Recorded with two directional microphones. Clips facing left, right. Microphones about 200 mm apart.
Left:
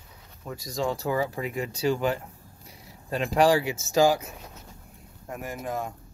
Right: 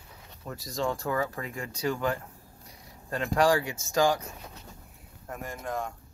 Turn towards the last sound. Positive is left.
turn(degrees=5)  # may be behind; listen again after turning